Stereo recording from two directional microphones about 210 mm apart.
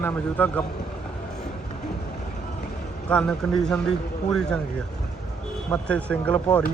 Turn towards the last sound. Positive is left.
turn(degrees=5)  # may be behind; listen again after turning